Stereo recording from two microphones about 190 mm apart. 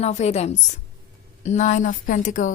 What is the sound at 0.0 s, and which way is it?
A woman's voice, 35° left (ahead or behind).